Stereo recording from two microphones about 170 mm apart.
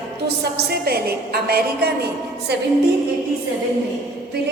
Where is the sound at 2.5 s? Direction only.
75° right (ahead or behind).